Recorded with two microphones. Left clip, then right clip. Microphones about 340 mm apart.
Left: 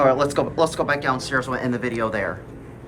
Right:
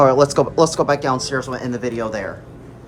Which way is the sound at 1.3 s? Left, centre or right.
Centre.